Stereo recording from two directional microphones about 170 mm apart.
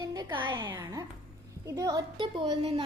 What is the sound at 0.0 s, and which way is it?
A woman's voice, 25° right (ahead or behind).